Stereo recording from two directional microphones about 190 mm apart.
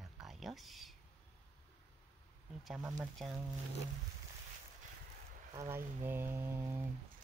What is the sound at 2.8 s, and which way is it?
Speech, 20° right (ahead or behind).